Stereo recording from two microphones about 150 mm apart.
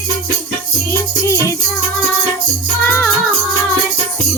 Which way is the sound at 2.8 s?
15° left (ahead or behind).